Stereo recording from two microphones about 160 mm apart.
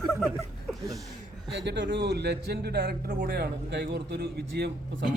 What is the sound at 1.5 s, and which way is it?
A man's voice, 90° right.